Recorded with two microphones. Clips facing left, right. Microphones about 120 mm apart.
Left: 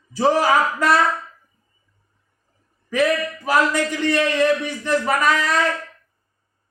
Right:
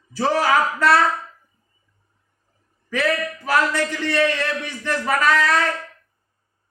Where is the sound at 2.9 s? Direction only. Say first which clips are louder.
Left 3 dB; 15° left (ahead or behind).